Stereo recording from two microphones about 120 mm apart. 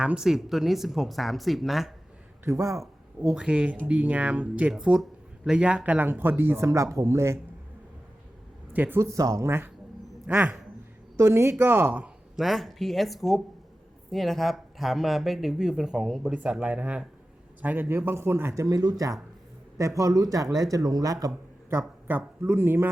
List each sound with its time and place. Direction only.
0.0 s speech: 5° right (ahead or behind)
2.4 s speech: 25° right (ahead or behind)
3.3 s speech: 10° right (ahead or behind)
8.7 s speech: 15° right (ahead or behind)
12.4 s speech: centre (ahead or behind); by 22.9 s 15° right (ahead or behind)